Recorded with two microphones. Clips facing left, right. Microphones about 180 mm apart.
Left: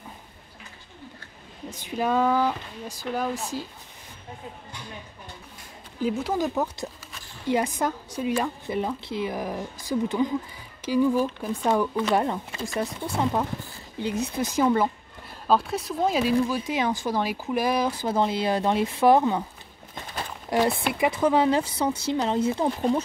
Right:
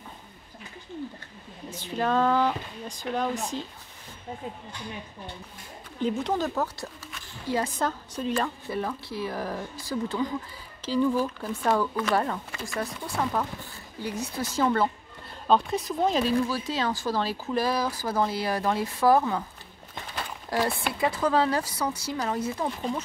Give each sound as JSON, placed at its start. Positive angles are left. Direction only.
{"t": 1.7, "sound": "speech", "side_deg": 10}
{"t": 5.9, "sound": "speech", "side_deg": 5}
{"t": 15.4, "sound": "speech", "side_deg": 5}
{"t": 20.4, "sound": "speech", "side_deg": 20}